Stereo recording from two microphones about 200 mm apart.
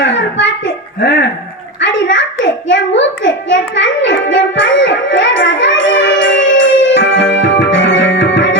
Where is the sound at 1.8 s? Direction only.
65° left (ahead or behind).